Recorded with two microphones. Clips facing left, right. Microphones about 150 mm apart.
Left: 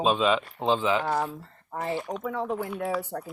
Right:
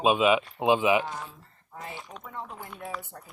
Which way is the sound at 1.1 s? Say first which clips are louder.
Left 11 dB; 85° left.